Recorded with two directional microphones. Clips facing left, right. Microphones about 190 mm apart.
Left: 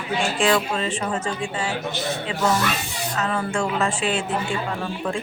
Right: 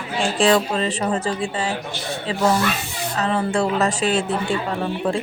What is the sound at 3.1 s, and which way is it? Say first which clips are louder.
Speech: right 4 dB; 35° right (ahead or behind).